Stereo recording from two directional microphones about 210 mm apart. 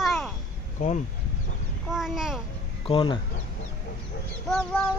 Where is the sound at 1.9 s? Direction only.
Centre (ahead or behind).